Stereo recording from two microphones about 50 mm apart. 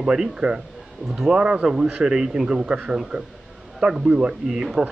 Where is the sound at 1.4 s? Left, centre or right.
Right.